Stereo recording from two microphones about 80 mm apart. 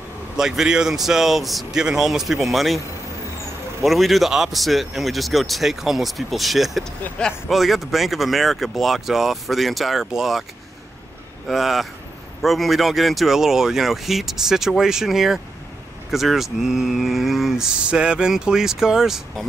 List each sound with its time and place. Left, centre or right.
0.4 s speech: centre
3.8 s speech: centre
11.4 s speech: centre